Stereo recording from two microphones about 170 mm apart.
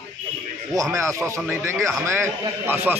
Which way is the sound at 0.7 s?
20° right (ahead or behind).